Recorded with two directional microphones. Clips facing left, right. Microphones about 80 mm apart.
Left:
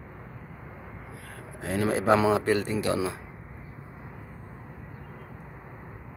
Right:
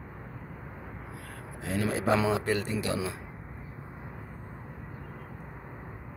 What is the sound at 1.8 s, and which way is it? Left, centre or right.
A man's voice, left.